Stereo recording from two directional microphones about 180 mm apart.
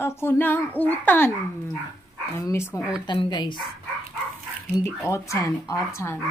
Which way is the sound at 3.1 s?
25° left (ahead or behind).